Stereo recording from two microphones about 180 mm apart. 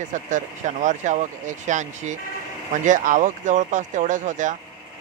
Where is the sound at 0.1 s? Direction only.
45° right (ahead or behind).